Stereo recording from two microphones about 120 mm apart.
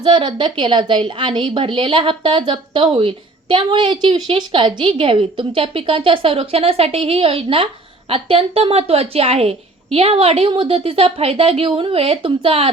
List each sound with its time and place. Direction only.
0.0 s a woman's voice: 40° right (ahead or behind)